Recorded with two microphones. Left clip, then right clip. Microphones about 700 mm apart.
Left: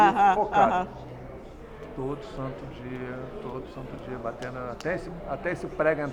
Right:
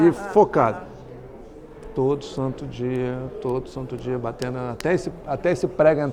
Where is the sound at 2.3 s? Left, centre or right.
Right.